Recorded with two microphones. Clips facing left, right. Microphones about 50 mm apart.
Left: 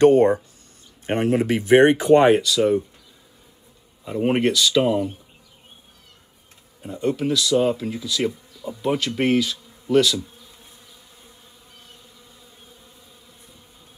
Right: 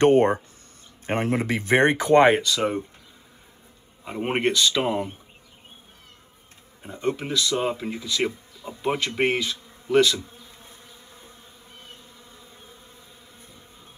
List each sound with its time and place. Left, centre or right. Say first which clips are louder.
0.0 s speech: left 3 dB; right
4.0 s speech: left 4 dB; right
6.8 s speech: left 4 dB; right
11.8 s bee: right 3 dB; right